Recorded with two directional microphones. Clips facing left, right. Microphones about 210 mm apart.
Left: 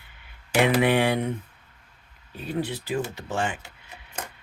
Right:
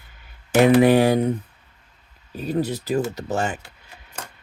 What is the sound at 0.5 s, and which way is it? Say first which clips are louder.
Speech: right 7 dB; 40° right (ahead or behind).